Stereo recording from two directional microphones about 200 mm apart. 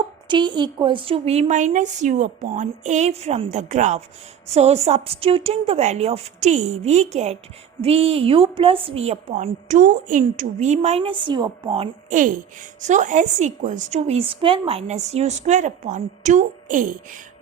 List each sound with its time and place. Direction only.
0.3 s a woman's voice: 25° right (ahead or behind)
12.8 s a woman's voice: 40° right (ahead or behind)